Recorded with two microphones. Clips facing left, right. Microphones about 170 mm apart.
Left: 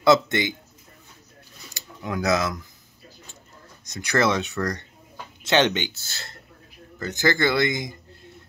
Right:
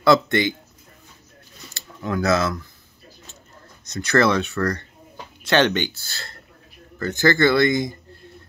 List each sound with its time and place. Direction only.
0.0 s speech: 20° left (ahead or behind)
1.7 s speech: 15° left (ahead or behind)
4.0 s speech: 15° left (ahead or behind)